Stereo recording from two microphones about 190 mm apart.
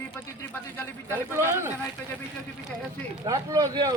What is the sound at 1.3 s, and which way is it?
Speech, 15° right (ahead or behind).